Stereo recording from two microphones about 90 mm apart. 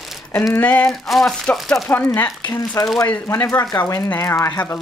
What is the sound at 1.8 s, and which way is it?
Speech, 25° left (ahead or behind).